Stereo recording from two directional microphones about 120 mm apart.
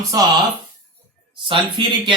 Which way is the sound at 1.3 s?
45° right (ahead or behind).